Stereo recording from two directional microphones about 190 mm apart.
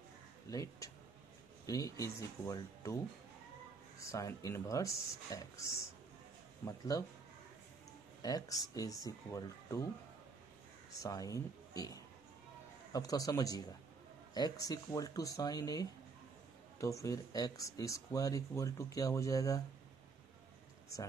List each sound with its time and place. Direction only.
0.5 s speech: 20° left (ahead or behind)
4.0 s speech: 15° left (ahead or behind)
8.2 s speech: 20° left (ahead or behind)
10.9 s speech: 15° left (ahead or behind)